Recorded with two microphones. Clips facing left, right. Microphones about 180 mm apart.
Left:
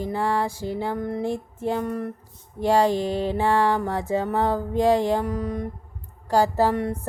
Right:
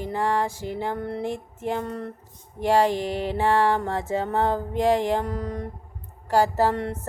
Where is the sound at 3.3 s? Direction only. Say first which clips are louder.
Right 1 dB; 15° left (ahead or behind).